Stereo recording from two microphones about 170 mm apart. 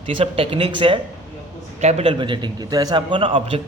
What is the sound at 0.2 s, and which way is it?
A man's voice, 30° right (ahead or behind).